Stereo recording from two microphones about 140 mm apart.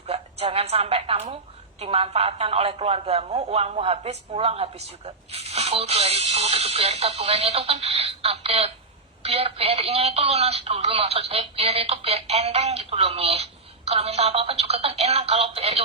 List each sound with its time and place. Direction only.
0.1 s a woman's voice: 45° right (ahead or behind)